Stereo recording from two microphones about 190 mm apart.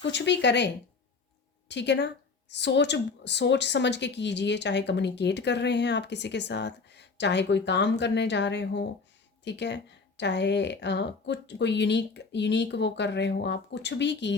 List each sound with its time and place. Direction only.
0.0 s a woman's voice: 65° left (ahead or behind)